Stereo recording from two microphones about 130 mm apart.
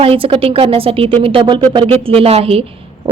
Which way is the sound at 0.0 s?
45° right (ahead or behind).